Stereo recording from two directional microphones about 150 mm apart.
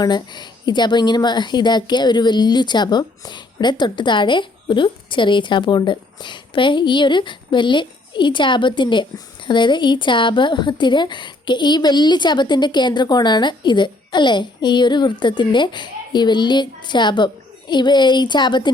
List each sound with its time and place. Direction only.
0.0 s a woman's voice: 30° left (ahead or behind)